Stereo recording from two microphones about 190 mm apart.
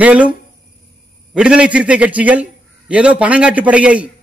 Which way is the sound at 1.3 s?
5° right (ahead or behind).